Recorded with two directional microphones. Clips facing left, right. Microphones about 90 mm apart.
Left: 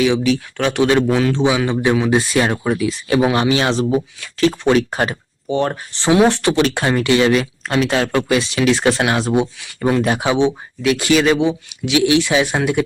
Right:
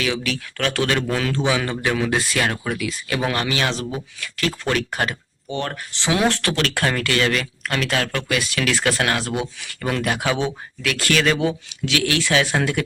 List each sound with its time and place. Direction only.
0.0 s speech: 15° left (ahead or behind)